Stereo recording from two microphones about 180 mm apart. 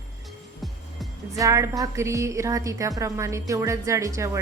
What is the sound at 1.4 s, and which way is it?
A woman's voice, 20° right (ahead or behind).